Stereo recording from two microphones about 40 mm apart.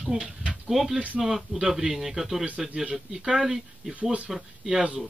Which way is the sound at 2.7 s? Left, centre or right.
Centre.